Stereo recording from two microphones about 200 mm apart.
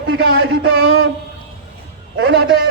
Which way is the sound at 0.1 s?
85° right.